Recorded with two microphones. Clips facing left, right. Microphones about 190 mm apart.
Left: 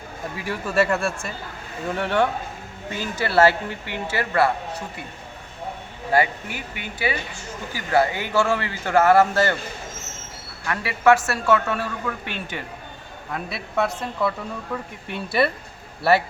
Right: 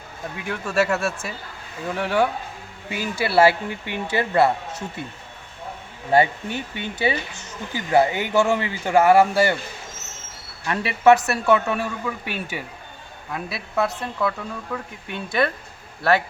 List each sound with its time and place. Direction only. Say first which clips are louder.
0.3 s speech: even; centre (ahead or behind); by 4.5 s 20° right (ahead or behind)
6.1 s speech: right 3 dB; 25° right (ahead or behind)
10.7 s speech: right 2 dB; 20° right (ahead or behind); by 15.5 s 5° left (ahead or behind)